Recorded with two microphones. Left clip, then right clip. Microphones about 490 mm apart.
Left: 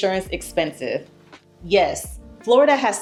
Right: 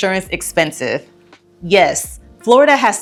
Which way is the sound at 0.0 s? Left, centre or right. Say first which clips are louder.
Right 4 dB; right.